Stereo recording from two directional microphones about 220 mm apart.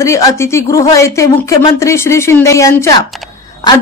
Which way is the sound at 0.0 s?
15° left (ahead or behind).